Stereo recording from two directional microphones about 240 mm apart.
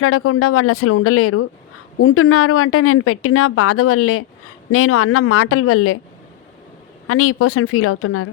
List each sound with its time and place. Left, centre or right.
0.0 s a woman's voice: left
7.1 s a woman's voice: left